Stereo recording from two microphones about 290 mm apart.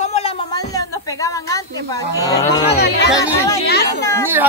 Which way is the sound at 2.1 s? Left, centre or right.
Centre.